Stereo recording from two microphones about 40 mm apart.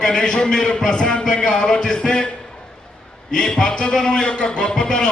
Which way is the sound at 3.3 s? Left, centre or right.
Centre.